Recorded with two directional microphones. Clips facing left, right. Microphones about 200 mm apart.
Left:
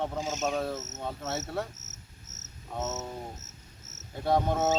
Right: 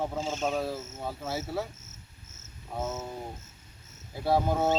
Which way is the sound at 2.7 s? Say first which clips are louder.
Right 1 dB; centre (ahead or behind).